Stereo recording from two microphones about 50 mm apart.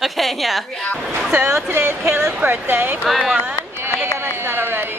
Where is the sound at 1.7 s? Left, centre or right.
Right.